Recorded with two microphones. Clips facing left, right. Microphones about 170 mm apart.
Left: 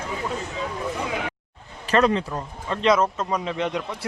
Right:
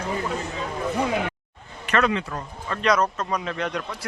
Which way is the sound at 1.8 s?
35° left (ahead or behind).